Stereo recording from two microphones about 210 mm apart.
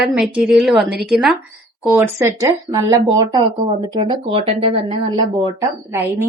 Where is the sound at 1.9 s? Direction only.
10° right (ahead or behind).